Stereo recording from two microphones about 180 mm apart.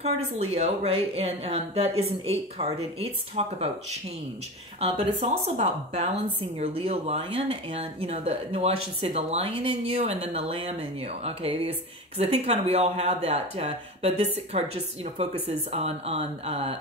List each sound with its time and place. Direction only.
0.0 s speech: 35° right (ahead or behind)